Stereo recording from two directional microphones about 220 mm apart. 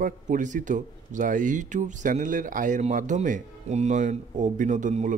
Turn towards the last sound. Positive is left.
turn(degrees=-35)  # may be behind; listen again after turning